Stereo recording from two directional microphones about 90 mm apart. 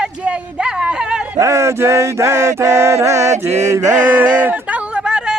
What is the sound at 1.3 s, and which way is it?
Chant, 35° right (ahead or behind).